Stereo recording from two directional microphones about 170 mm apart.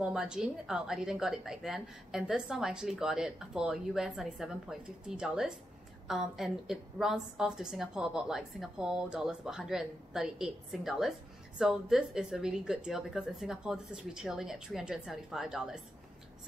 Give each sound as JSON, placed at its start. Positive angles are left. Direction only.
{"t": 0.0, "sound": "a woman's voice", "side_deg": -5}